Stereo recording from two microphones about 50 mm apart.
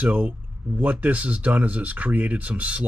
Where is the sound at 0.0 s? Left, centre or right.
Right.